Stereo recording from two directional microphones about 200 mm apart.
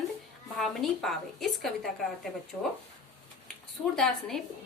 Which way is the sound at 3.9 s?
Centre (ahead or behind).